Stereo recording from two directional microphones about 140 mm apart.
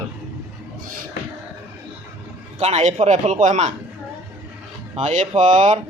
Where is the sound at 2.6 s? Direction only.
50° right (ahead or behind).